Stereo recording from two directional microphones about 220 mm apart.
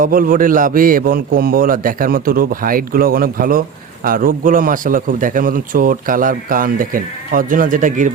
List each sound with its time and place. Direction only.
0.0 s a man's voice: 40° right (ahead or behind)